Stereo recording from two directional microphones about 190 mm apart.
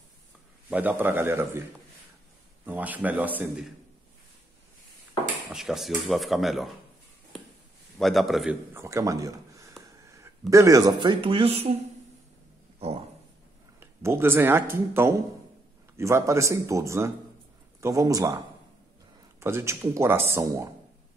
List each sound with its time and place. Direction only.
0.7 s speech: 10° right (ahead or behind)
2.6 s speech: 10° right (ahead or behind)
5.5 s speech: centre (ahead or behind)
8.0 s speech: centre (ahead or behind)
8.7 s speech: 15° right (ahead or behind)
13.7 s speech: 10° right (ahead or behind)
19.4 s speech: 15° right (ahead or behind)